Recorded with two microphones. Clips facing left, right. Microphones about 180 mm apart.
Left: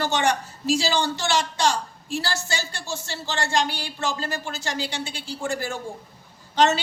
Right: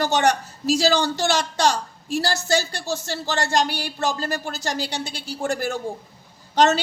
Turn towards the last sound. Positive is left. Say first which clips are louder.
# right 2 dB
turn(degrees=-40)  # may be behind; listen again after turning